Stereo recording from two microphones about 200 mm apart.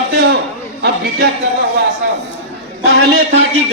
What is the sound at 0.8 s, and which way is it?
Speech, 50° right (ahead or behind).